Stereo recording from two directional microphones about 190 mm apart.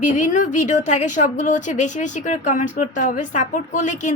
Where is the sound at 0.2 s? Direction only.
40° left (ahead or behind).